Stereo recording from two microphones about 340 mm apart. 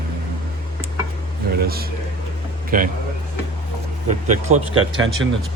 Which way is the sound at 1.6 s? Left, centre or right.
Right.